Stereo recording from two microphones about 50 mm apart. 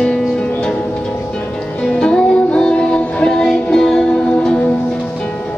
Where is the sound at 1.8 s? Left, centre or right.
Centre.